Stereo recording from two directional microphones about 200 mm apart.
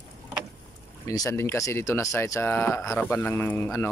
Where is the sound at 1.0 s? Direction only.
15° left (ahead or behind).